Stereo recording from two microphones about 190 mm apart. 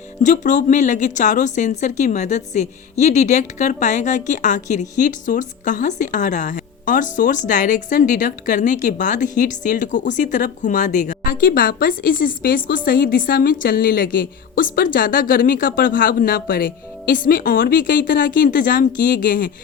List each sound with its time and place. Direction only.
0.2 s a woman's voice: 40° left (ahead or behind)